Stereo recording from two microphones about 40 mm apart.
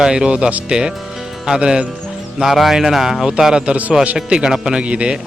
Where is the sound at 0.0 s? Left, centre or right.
Centre.